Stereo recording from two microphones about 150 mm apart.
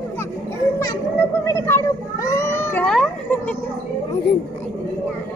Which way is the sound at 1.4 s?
15° left (ahead or behind).